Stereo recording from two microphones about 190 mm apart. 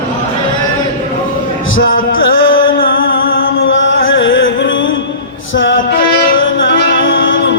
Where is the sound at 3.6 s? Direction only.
90° left.